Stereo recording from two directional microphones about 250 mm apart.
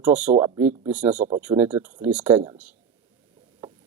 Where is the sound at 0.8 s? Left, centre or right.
Centre.